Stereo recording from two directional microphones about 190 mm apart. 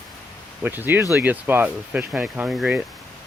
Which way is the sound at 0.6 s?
10° right (ahead or behind).